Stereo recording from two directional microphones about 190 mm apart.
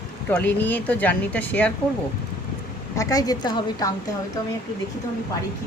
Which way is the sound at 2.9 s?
15° left (ahead or behind).